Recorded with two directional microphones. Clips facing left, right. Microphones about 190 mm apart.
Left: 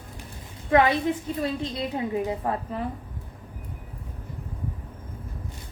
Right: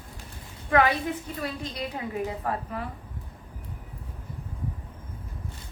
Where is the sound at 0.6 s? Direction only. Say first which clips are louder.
Left 3 dB; 25° left (ahead or behind).